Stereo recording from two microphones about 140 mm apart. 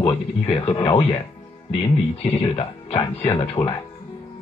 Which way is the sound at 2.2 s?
40° left (ahead or behind).